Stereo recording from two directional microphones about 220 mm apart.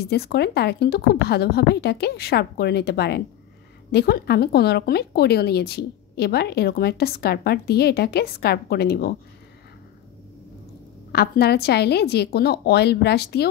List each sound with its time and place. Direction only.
0.1 s speech: 45° left (ahead or behind)
11.1 s speech: 45° left (ahead or behind)